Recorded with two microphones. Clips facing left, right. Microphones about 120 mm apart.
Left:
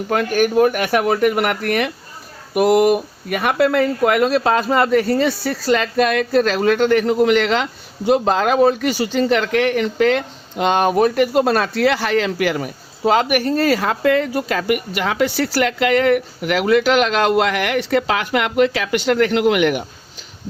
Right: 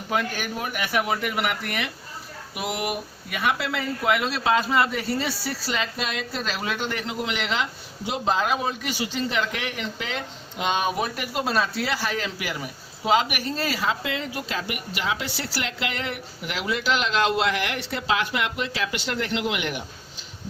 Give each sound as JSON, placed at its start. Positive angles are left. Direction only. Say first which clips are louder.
{"t": 0.1, "sound": "speech", "louder": "left 10 dB", "side_deg": 55}
{"t": 9.2, "sound": "speech", "louder": "left 12 dB", "side_deg": 60}